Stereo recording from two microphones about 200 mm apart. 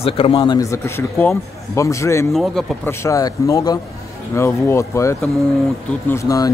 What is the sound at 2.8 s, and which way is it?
Speech, 15° left (ahead or behind).